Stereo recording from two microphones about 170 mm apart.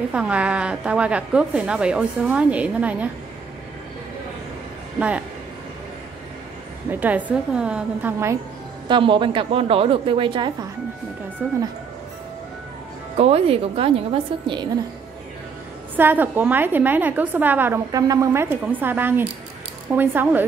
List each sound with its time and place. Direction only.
0.1 s a woman's voice: 5° right (ahead or behind)
4.9 s speech: 5° right (ahead or behind)
6.9 s a woman's voice: 10° right (ahead or behind)
8.8 s a woman's voice: 30° right (ahead or behind)
11.4 s a woman's voice: 10° right (ahead or behind)
13.2 s a woman's voice: 35° right (ahead or behind)
16.0 s a woman's voice: 10° right (ahead or behind)